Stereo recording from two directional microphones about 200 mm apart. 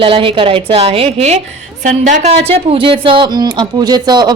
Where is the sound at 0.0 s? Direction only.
25° right (ahead or behind).